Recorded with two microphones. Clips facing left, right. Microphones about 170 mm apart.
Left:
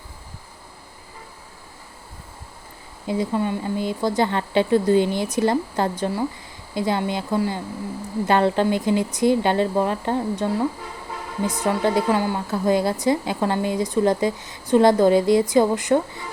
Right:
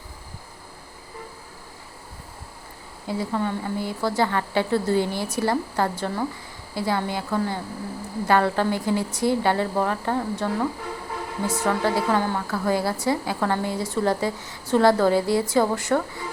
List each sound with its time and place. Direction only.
3.1 s a woman's voice: 20° left (ahead or behind)